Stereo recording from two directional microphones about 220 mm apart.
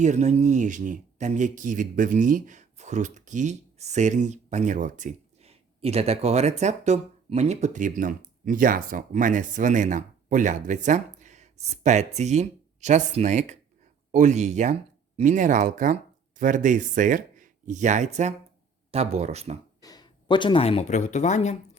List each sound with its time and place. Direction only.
0.0 s speech: 30° right (ahead or behind)
19.8 s speech: 15° left (ahead or behind)